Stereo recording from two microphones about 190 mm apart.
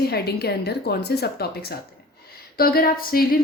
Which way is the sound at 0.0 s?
55° left (ahead or behind).